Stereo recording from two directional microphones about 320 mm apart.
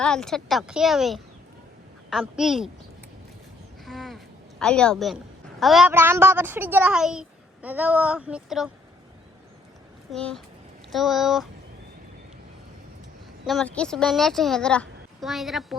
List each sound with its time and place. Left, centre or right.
0.0 s a woman's voice: centre
3.8 s a sound: centre
4.6 s a woman's voice: centre
10.1 s a woman's voice: centre
13.4 s a woman's voice: centre